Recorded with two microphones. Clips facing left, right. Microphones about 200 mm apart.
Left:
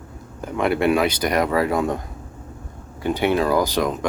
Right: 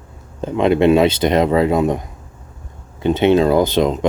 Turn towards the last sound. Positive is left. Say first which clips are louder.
# right 5 dB
turn(degrees=-20)  # may be behind; listen again after turning